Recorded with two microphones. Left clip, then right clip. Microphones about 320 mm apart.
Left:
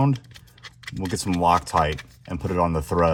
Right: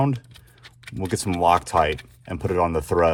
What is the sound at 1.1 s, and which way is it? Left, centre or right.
Speech, right.